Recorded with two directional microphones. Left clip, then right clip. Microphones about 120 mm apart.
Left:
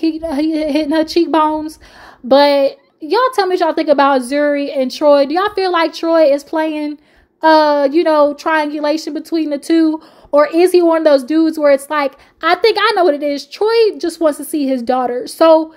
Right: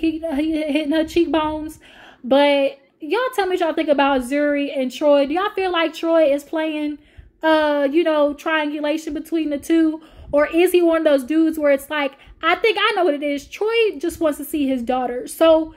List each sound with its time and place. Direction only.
0.0 s a woman's voice: 40° left (ahead or behind)